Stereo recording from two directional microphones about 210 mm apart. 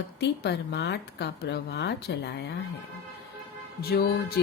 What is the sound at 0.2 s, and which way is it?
Speech, 55° left (ahead or behind).